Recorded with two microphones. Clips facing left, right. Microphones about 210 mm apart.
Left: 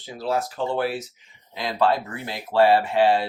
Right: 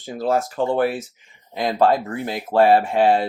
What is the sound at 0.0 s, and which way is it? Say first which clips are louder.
Speech: right 4 dB; 50° right (ahead or behind).